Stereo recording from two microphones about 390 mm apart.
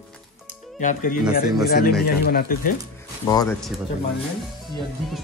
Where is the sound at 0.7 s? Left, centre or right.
Centre.